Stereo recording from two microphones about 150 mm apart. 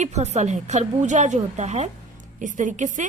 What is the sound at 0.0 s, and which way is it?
A woman's voice, 50° right (ahead or behind).